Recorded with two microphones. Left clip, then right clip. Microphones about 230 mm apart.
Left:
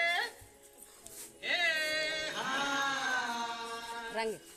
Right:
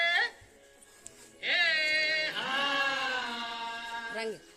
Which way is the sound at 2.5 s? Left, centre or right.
Centre.